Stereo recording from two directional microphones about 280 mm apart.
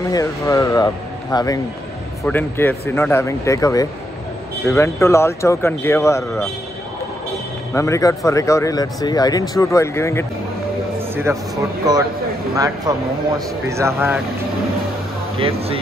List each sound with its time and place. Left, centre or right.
0.1 s speech: centre
7.7 s speech: centre
11.0 s a sound: centre
12.5 s speech: centre
15.3 s speech: centre